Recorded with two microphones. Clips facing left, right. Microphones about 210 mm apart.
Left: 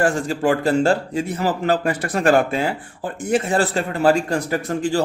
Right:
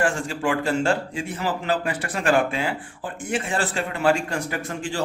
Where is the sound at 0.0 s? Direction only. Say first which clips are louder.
Left 5 dB; 40° left (ahead or behind).